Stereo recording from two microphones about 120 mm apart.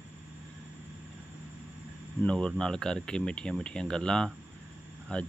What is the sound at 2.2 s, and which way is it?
Speech, 5° left (ahead or behind).